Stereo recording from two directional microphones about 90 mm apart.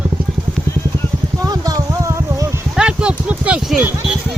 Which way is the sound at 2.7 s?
10° right (ahead or behind).